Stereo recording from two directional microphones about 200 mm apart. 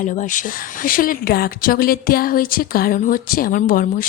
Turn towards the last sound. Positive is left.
turn(degrees=45)  # may be behind; listen again after turning